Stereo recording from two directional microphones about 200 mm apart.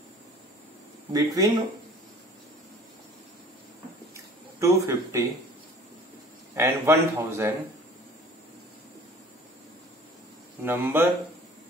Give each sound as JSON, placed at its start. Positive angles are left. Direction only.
{"t": 1.1, "sound": "speech", "side_deg": -15}
{"t": 4.6, "sound": "speech", "side_deg": -15}
{"t": 6.5, "sound": "speech", "side_deg": -10}
{"t": 10.6, "sound": "speech", "side_deg": -10}